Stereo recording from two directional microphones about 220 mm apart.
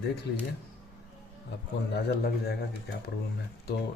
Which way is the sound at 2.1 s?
45° left (ahead or behind).